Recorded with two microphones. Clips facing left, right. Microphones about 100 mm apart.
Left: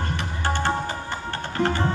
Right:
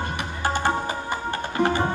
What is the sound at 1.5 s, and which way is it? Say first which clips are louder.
Music: right 1 dB; 15° right (ahead or behind).